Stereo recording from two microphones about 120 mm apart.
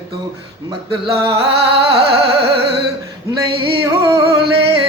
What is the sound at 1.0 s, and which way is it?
Music, 50° right (ahead or behind).